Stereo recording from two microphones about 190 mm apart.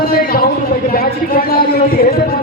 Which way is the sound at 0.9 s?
50° left (ahead or behind).